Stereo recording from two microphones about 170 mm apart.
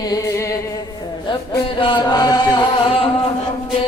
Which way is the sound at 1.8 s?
25° left (ahead or behind).